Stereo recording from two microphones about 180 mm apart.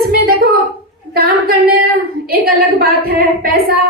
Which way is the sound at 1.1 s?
55° right (ahead or behind).